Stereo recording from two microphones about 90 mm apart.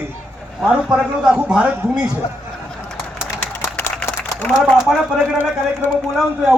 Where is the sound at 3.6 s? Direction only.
20° left (ahead or behind).